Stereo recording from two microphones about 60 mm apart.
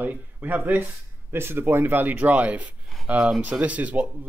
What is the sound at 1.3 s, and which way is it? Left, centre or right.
Speech, right.